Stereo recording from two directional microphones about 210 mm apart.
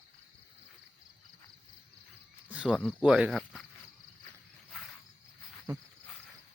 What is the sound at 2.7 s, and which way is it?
Speech, 5° left (ahead or behind).